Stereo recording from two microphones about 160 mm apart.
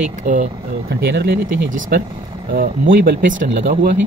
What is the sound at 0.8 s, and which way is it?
Speech, 90° right.